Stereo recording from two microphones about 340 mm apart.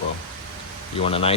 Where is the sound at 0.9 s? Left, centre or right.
Centre.